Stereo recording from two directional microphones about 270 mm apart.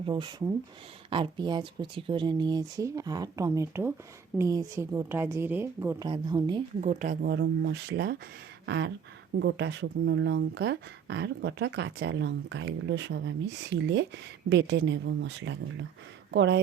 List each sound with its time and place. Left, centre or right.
0.0 s speech: centre
6.8 s speech: right
8.6 s a sound: right
9.4 s speech: right